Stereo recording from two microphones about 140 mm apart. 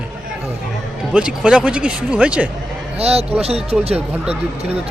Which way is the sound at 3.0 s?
45° right (ahead or behind).